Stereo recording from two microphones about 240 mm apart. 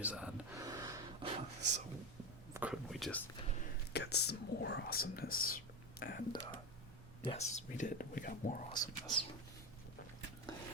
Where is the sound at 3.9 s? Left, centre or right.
Left.